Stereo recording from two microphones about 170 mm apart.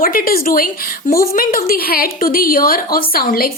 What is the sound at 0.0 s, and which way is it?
A woman's voice, 55° left (ahead or behind).